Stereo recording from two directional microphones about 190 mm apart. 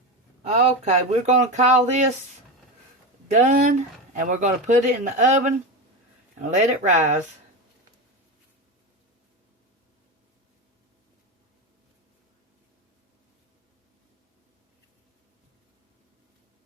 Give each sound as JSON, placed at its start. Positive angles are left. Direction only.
{"t": 0.4, "sound": "speech", "side_deg": -35}
{"t": 3.2, "sound": "speech", "side_deg": -40}